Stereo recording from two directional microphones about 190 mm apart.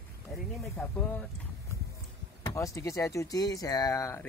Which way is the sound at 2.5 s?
15° left (ahead or behind).